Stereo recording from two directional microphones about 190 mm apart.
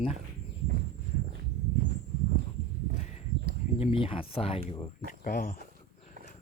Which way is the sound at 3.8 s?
30° left (ahead or behind).